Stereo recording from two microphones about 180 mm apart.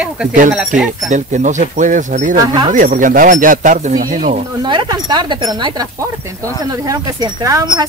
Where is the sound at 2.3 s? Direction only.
20° right (ahead or behind).